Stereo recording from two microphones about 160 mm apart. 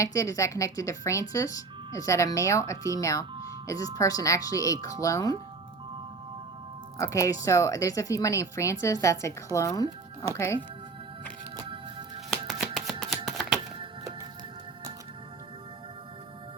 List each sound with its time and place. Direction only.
0.0 s speech: 20° left (ahead or behind)
7.0 s speech: 20° left (ahead or behind)
11.5 s music: 30° right (ahead or behind)
12.5 s a sound: centre (ahead or behind)